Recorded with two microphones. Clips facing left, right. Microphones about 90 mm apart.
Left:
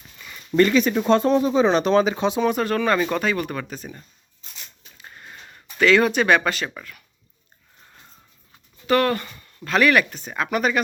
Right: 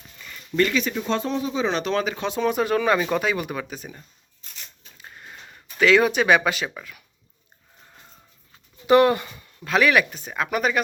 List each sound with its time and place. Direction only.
0.2 s a sound: 5° left (ahead or behind)
0.5 s speech: 35° left (ahead or behind)
0.9 s speech: 50° left (ahead or behind); by 2.4 s 20° left (ahead or behind)
2.4 s speech: 5° right (ahead or behind)
4.9 s a sound: centre (ahead or behind)
5.8 s speech: 5° right (ahead or behind)
8.9 s speech: 20° right (ahead or behind); by 10.8 s centre (ahead or behind)